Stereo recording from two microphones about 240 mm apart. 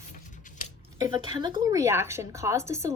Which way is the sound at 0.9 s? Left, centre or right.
Centre.